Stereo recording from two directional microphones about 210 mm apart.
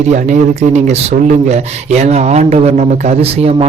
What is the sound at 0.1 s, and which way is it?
A man's voice, 35° right (ahead or behind).